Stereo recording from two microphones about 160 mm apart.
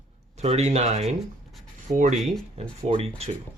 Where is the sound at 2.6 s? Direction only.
35° right (ahead or behind).